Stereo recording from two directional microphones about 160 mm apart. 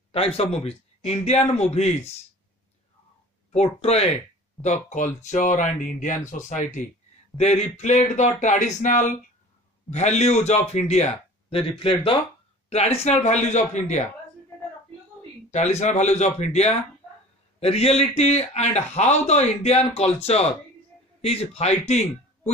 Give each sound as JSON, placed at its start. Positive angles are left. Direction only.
{"t": 0.1, "sound": "a man's voice", "side_deg": 40}
{"t": 3.5, "sound": "a man's voice", "side_deg": 40}
{"t": 15.5, "sound": "a man's voice", "side_deg": 45}